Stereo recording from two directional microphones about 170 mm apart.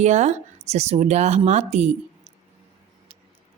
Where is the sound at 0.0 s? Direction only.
40° right (ahead or behind).